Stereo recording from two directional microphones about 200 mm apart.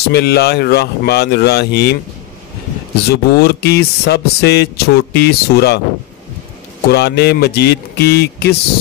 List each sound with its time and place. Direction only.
0.1 s speech: 55° left (ahead or behind)
3.1 s speech: 55° left (ahead or behind)
6.9 s speech: 55° left (ahead or behind)